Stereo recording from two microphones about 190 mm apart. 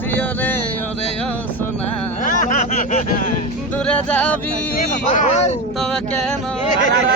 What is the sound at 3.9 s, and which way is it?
Speech, 5° left (ahead or behind).